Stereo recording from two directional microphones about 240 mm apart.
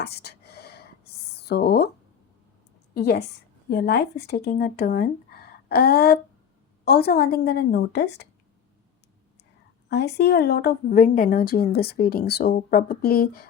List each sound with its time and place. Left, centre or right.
0.0 s a sound: left
2.9 s a woman's voice: left
9.9 s a woman's voice: left